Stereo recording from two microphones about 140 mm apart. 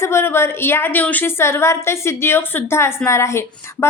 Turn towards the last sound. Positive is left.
turn(degrees=20)  # may be behind; listen again after turning